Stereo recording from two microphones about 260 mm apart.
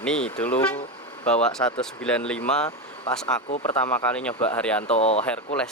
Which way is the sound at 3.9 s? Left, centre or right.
Centre.